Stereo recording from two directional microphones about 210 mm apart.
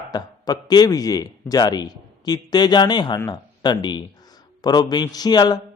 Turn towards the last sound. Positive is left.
turn(degrees=20)  # may be behind; listen again after turning